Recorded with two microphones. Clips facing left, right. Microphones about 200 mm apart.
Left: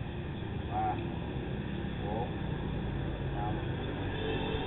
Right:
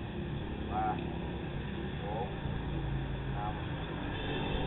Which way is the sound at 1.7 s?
Centre (ahead or behind).